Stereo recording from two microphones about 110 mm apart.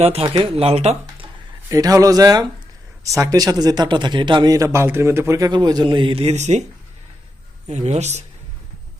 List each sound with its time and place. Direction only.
0.0 s speech: 65° right (ahead or behind)
1.7 s a man's voice: 30° right (ahead or behind)
4.5 s a man's voice: 25° right (ahead or behind)
5.5 s a man's voice: 40° right (ahead or behind)
6.2 s a man's voice: 90° right
7.7 s a man's voice: 85° right